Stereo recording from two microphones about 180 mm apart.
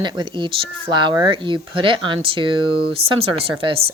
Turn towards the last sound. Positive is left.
turn(degrees=-30)  # may be behind; listen again after turning